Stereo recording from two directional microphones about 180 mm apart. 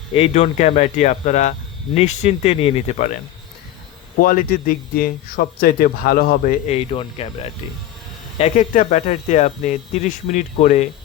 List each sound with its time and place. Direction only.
0.1 s speech: 35° left (ahead or behind)
4.2 s speech: 50° left (ahead or behind)
6.7 s speech: 30° left (ahead or behind)
8.4 s speech: 45° left (ahead or behind)